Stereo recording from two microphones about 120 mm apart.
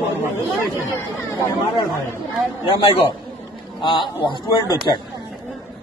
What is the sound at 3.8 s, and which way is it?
Speech, 40° left (ahead or behind).